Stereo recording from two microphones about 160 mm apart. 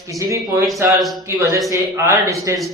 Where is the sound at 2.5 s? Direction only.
20° right (ahead or behind).